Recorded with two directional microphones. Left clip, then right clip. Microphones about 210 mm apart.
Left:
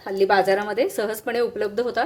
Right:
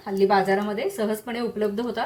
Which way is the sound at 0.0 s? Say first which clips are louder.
Left 2 dB; 55° left (ahead or behind).